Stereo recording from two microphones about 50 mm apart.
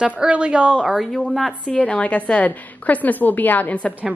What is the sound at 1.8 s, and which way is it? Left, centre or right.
A woman's voice, left.